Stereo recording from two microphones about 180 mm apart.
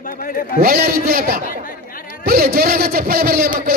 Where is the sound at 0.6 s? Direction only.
60° right (ahead or behind).